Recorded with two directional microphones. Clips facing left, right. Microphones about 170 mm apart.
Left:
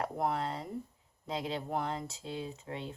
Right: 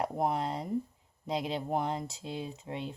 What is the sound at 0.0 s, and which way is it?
A woman's voice, 15° right (ahead or behind).